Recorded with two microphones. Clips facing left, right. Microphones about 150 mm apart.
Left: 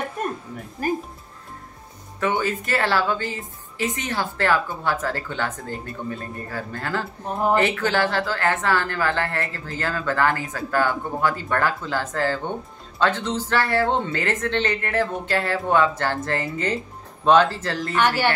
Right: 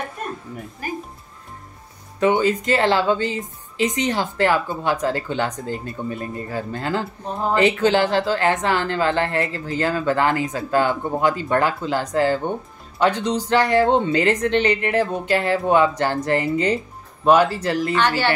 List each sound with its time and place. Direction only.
0.8 s speech: 45° left (ahead or behind)
2.1 s speech: 20° right (ahead or behind)